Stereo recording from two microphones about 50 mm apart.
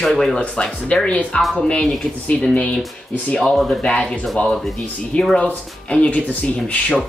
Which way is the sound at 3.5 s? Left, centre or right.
Centre.